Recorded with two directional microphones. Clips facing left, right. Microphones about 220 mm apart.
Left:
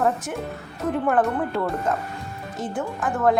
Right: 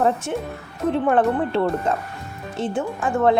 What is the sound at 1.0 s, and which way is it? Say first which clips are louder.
A woman's voice: right 2 dB; 25° right (ahead or behind).